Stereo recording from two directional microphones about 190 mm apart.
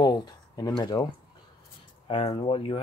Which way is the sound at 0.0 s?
20° left (ahead or behind).